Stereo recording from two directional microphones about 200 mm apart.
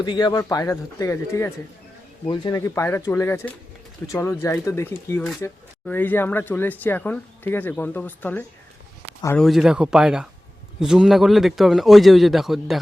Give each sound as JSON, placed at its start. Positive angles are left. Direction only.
{"t": 0.0, "sound": "speech", "side_deg": 20}
{"t": 9.4, "sound": "a man's voice", "side_deg": 0}